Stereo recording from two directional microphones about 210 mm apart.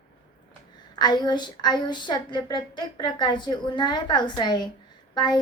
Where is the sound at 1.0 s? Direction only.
20° left (ahead or behind).